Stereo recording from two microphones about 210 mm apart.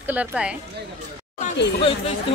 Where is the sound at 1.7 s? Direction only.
30° left (ahead or behind).